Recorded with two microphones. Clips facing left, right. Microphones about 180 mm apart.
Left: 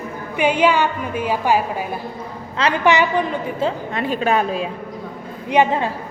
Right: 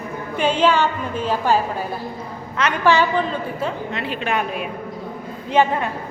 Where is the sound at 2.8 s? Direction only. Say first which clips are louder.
Even; 15° left (ahead or behind).